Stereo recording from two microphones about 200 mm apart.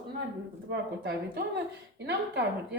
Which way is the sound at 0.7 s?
55° right (ahead or behind).